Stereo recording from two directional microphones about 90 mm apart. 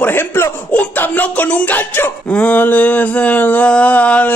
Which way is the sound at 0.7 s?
15° left (ahead or behind).